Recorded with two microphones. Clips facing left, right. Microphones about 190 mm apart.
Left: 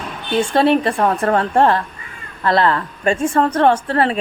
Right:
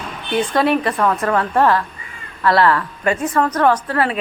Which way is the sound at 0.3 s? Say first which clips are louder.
Left 2 dB; 25° left (ahead or behind).